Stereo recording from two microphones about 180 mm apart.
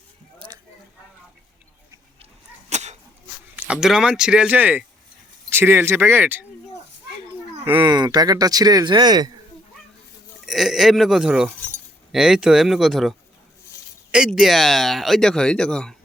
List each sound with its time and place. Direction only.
2.6 s a sound: 40° right (ahead or behind)
3.5 s speech: 5° right (ahead or behind)
7.6 s speech: 25° right (ahead or behind)
10.4 s speech: centre (ahead or behind)
14.3 s speech: centre (ahead or behind)